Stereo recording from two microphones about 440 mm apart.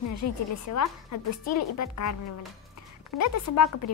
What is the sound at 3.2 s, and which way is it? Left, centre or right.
Speech, left.